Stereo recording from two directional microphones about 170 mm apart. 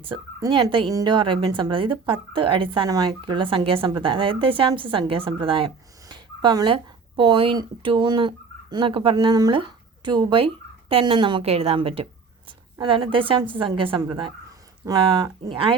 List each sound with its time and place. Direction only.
0.0 s speech: 30° right (ahead or behind)